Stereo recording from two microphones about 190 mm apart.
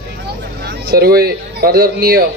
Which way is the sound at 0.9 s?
55° right (ahead or behind).